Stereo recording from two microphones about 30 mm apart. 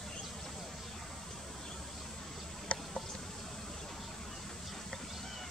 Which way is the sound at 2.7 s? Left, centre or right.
Left.